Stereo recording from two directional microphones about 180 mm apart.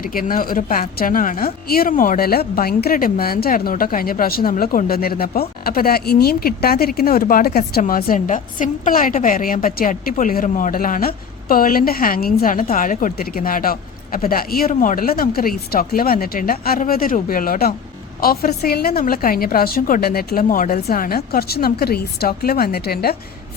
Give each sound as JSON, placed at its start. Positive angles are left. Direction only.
{"t": 0.0, "sound": "a woman's voice", "side_deg": 50}